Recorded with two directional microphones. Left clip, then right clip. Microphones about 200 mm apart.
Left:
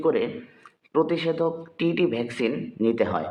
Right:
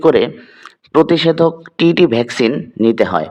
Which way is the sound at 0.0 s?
50° right (ahead or behind).